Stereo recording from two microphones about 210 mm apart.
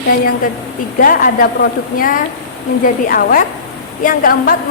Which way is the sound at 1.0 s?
40° left (ahead or behind).